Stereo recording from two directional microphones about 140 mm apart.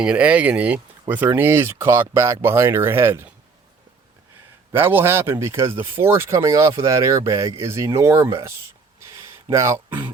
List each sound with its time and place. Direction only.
0.0 s speech: 10° right (ahead or behind)
4.7 s speech: 15° right (ahead or behind)
9.0 s a sound: 20° right (ahead or behind)